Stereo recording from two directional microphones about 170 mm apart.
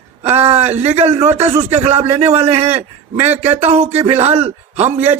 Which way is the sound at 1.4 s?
35° right (ahead or behind).